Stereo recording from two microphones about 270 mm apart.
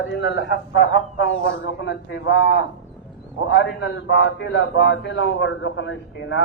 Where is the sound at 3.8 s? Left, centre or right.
Left.